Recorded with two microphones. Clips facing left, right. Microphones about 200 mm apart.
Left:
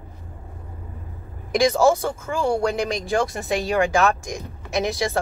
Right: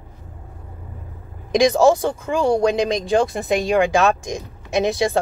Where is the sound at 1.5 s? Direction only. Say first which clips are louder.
Right 3 dB; 15° right (ahead or behind).